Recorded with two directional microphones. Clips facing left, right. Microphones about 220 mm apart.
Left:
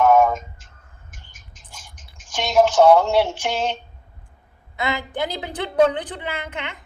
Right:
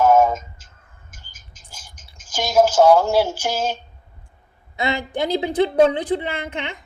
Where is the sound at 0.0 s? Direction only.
Centre (ahead or behind).